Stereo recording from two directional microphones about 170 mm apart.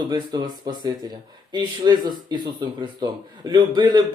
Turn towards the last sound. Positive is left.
turn(degrees=-25)  # may be behind; listen again after turning